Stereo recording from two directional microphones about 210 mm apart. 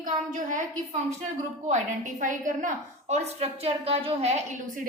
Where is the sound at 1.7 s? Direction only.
35° right (ahead or behind).